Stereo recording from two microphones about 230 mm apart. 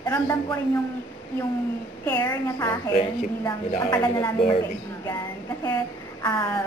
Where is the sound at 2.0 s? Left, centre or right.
Centre.